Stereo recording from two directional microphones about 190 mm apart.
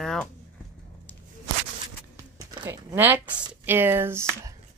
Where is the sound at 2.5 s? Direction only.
20° right (ahead or behind).